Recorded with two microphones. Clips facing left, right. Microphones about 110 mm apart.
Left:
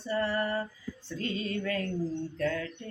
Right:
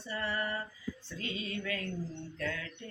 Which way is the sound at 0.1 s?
35° left (ahead or behind).